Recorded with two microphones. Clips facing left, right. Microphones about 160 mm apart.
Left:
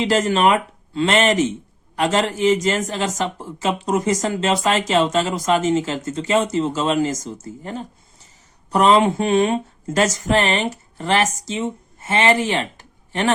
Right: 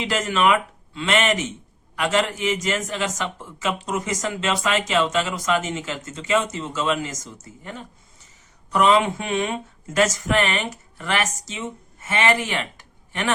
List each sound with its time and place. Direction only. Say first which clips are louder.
0.0 s speech: left 4 dB; 35° left (ahead or behind)